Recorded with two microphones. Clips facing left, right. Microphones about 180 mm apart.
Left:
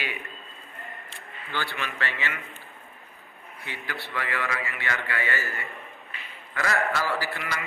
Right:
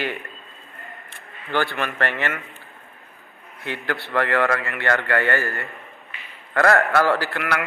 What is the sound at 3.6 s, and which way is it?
A man's voice, 60° right (ahead or behind).